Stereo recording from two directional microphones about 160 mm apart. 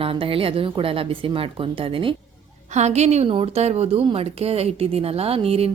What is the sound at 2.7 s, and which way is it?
Speech, 45° right (ahead or behind).